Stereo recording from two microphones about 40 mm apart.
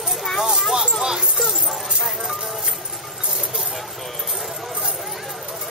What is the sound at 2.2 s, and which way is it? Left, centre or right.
Speech, centre.